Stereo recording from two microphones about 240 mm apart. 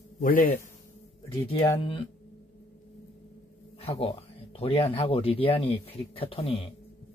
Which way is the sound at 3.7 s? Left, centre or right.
Left.